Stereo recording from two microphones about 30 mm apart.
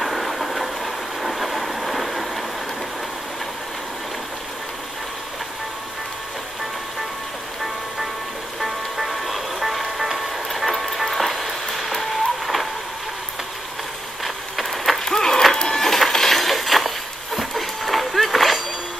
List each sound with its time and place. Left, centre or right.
0.0 s train: centre
8.5 s music: centre
14.2 s vehicle: centre
15.0 s music: centre
15.7 s a sound: centre